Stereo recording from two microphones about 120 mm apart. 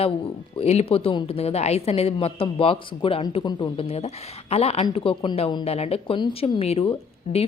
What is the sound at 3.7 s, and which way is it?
A woman's voice, 55° left (ahead or behind).